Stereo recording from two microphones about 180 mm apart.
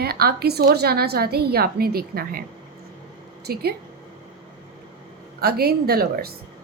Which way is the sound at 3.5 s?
60° right (ahead or behind).